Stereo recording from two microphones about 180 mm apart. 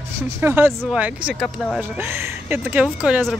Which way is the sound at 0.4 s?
10° right (ahead or behind).